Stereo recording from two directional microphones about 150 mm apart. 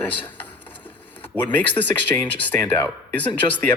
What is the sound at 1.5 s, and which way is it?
Speech, 10° left (ahead or behind).